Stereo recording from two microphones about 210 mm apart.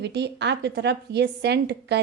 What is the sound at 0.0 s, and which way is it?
Speech, 55° right (ahead or behind).